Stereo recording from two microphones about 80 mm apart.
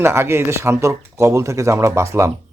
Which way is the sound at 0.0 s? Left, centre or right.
Right.